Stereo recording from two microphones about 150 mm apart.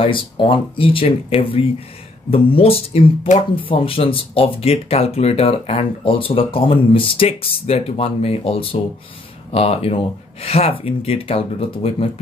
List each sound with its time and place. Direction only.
0.0 s speech: 35° left (ahead or behind)